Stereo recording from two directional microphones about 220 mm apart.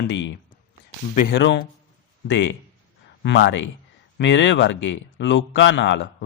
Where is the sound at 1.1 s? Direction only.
45° left (ahead or behind).